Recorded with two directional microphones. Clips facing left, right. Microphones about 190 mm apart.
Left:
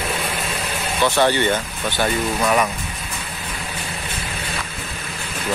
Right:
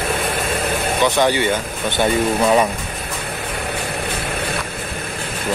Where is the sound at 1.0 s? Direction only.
15° right (ahead or behind).